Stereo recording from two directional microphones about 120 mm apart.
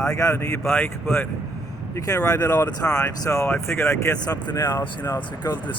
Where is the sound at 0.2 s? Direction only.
25° left (ahead or behind).